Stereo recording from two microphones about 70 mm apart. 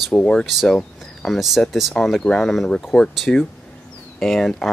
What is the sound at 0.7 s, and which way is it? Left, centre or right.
Speech, centre.